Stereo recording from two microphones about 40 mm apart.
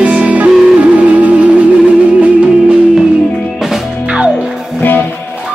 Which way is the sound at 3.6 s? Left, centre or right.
Centre.